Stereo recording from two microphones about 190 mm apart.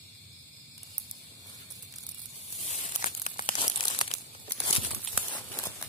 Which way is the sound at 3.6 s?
25° left (ahead or behind).